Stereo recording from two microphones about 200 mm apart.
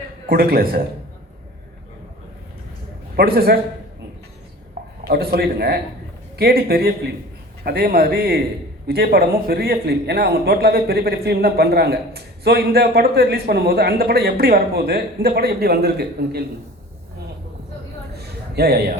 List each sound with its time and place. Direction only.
0.3 s a man's voice: 45° right (ahead or behind)
3.2 s a man's voice: 50° right (ahead or behind)
5.0 s a man's voice: 50° right (ahead or behind)
18.2 s a sound: 55° right (ahead or behind)